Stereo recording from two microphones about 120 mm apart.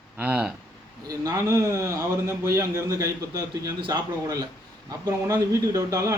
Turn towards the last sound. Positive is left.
turn(degrees=-30)  # may be behind; listen again after turning